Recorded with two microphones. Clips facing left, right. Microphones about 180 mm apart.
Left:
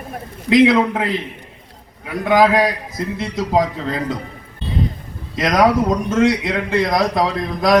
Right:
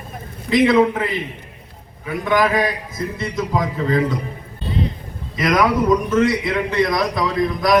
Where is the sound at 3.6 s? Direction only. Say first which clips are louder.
Right 2 dB; 50° right (ahead or behind).